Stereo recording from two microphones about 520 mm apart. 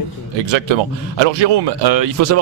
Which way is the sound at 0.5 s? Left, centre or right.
Right.